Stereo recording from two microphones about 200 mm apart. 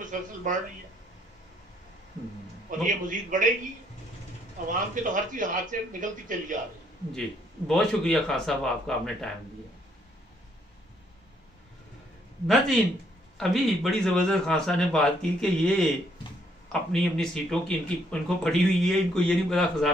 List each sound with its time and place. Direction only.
0.0 s speech: 40° right (ahead or behind)
2.8 s a man's voice: 40° right (ahead or behind)
4.7 s a man's voice: 40° right (ahead or behind)
7.1 s speech: centre (ahead or behind)
13.4 s speech: centre (ahead or behind)